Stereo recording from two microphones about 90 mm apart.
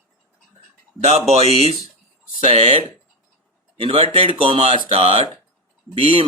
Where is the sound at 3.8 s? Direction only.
90° right.